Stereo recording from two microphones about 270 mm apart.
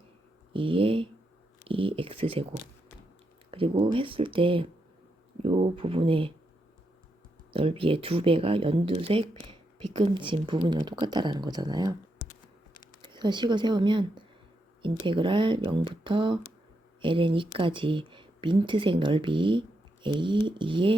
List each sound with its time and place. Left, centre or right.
0.5 s speech: centre
7.5 s speech: centre
13.0 s speech: centre